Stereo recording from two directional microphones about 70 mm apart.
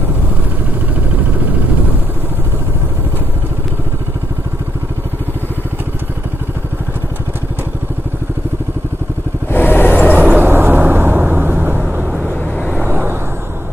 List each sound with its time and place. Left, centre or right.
9.5 s vehicle: left
10.1 s vehicle: right
11.8 s vehicle: centre
12.7 s vehicle: right